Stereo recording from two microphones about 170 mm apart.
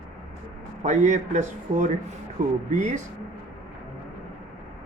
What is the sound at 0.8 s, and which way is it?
A man's voice, 45° right (ahead or behind).